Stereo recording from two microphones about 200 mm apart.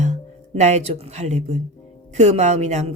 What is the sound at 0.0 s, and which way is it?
Speech, 35° right (ahead or behind).